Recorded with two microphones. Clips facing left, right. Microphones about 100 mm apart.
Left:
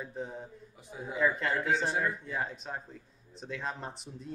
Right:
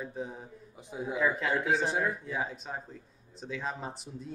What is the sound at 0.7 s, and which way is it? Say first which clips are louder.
Speech: right 6 dB; 20° right (ahead or behind).